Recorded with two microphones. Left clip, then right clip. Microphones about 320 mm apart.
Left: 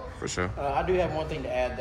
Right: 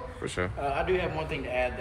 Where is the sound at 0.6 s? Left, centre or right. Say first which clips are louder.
Left 2 dB; left.